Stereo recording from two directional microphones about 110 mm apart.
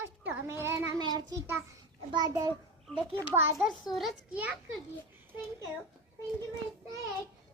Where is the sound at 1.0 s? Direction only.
40° right (ahead or behind).